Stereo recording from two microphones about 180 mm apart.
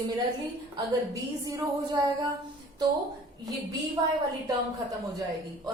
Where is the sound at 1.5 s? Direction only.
20° right (ahead or behind).